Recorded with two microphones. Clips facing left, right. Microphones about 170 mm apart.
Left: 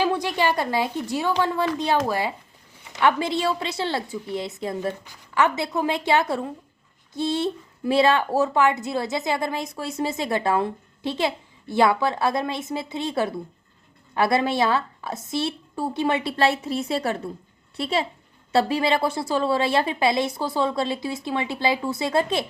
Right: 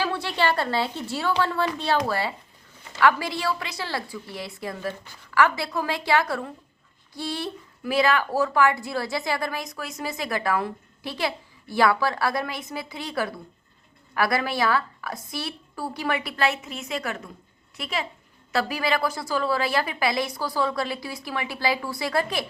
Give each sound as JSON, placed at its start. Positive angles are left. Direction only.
{"t": 0.0, "sound": "a woman's voice", "side_deg": 15}